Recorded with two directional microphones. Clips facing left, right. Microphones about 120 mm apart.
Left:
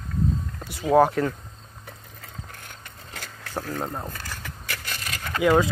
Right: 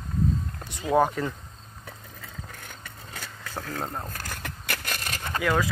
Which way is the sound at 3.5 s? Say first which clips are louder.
Left 3 dB; 15° left (ahead or behind).